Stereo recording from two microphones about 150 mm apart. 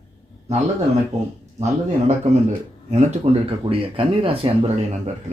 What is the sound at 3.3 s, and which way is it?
Speech, 40° right (ahead or behind).